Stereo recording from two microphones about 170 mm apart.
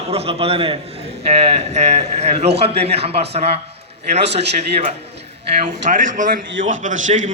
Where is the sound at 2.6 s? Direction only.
35° right (ahead or behind).